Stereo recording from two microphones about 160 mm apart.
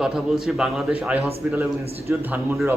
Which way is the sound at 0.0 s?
Centre (ahead or behind).